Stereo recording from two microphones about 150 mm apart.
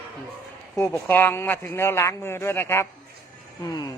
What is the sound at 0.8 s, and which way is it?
Speech, 15° left (ahead or behind).